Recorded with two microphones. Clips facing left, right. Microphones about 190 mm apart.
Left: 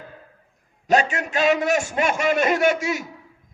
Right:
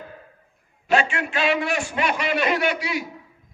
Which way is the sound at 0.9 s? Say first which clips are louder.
Left 2 dB; 40° left (ahead or behind).